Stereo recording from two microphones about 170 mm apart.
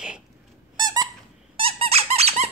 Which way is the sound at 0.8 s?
25° right (ahead or behind).